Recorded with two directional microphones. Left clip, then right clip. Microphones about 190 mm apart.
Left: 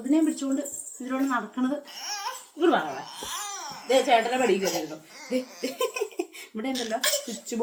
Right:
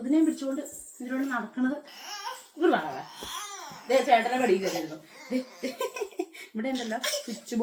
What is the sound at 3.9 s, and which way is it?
Speech, 20° left (ahead or behind).